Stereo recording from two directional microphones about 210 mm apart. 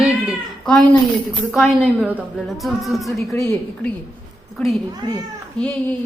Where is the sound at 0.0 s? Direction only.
Centre (ahead or behind).